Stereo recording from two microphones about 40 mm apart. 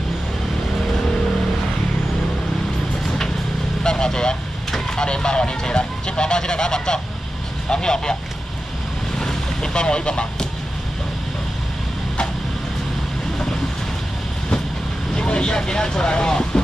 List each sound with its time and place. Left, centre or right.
3.8 s vehicle: centre
4.6 s a sound: centre
5.0 s vehicle: left
7.7 s speech: centre
9.2 s boat: centre
15.1 s speech: left